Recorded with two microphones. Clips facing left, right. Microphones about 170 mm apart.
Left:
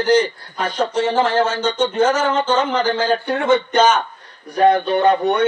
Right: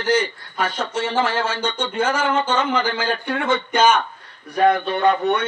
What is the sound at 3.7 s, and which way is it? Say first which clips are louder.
Speech: right 2 dB; 10° right (ahead or behind).